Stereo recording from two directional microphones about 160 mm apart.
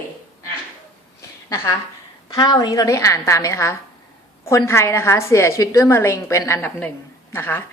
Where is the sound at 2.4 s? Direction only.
25° left (ahead or behind).